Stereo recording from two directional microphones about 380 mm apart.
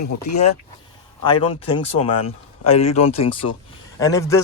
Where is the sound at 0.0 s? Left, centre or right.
Left.